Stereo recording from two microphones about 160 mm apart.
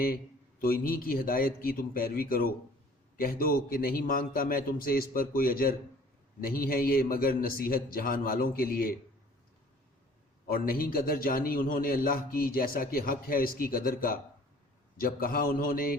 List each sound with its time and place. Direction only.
0.6 s a man's voice: 65° left (ahead or behind)
10.5 s a man's voice: 65° left (ahead or behind)